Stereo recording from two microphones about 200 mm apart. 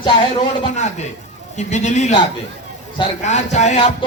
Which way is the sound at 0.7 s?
35° left (ahead or behind).